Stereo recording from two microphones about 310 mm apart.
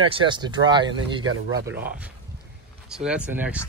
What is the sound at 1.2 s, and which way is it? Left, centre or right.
Speech, right.